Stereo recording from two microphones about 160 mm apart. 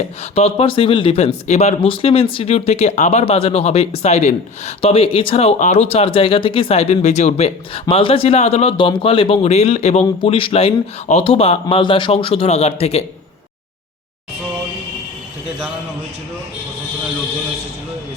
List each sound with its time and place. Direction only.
0.3 s speech: 35° left (ahead or behind)